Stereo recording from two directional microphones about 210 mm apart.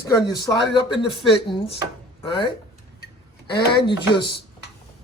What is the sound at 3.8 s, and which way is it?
Speech, 20° left (ahead or behind).